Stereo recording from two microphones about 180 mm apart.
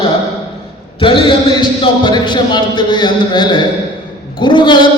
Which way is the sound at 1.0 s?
30° left (ahead or behind).